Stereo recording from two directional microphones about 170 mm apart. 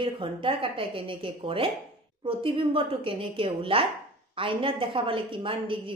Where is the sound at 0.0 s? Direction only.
30° right (ahead or behind).